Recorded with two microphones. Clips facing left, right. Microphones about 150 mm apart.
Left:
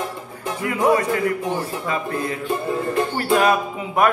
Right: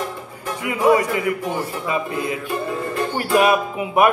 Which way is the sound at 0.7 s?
15° right (ahead or behind).